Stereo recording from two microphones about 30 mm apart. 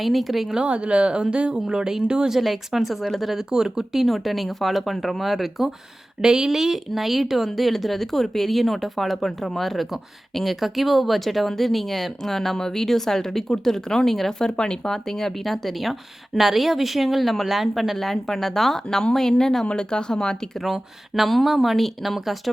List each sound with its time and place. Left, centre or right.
0.0 s speech: centre
0.6 s speech: right
1.6 s speech: right
2.4 s speech: centre
3.3 s speech: centre
4.0 s speech: centre
6.2 s speech: right
6.5 s speech: centre; by 14.9 s left
14.9 s speech: centre
18.0 s speech: centre
20.7 s speech: centre